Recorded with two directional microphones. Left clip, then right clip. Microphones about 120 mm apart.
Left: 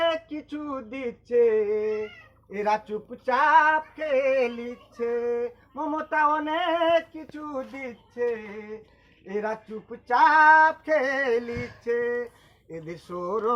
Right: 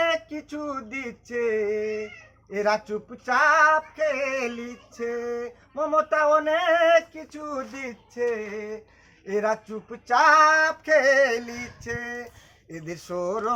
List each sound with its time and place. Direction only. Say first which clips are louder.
0.1 s male singing: right 2 dB; 35° right (ahead or behind)
2.5 s a sound: right 2 dB; 40° right (ahead or behind)
9.3 s male singing: right 5 dB; 35° right (ahead or behind)
11.4 s male singing: left 3 dB; 5° left (ahead or behind)
11.9 s male singing: left 7 dB; 40° right (ahead or behind)